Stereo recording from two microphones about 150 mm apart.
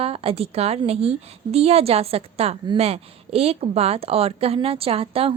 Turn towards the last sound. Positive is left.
turn(degrees=-40)  # may be behind; listen again after turning